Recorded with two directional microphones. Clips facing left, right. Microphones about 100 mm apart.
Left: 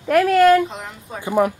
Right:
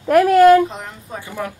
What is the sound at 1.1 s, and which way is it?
Speech, 20° left (ahead or behind).